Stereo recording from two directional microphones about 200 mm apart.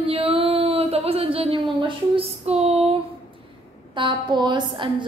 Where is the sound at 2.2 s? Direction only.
30° right (ahead or behind).